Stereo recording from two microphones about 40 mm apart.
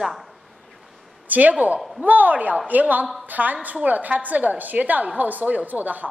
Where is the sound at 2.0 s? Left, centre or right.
Right.